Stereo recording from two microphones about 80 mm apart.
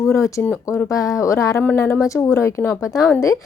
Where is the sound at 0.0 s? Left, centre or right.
Left.